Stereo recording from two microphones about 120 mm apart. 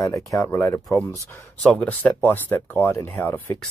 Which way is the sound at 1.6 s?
5° left (ahead or behind).